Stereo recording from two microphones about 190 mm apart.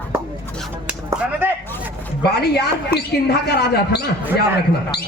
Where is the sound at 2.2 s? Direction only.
60° left (ahead or behind).